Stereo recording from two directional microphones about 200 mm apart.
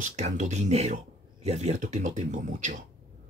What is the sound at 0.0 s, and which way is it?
Speech, 35° right (ahead or behind).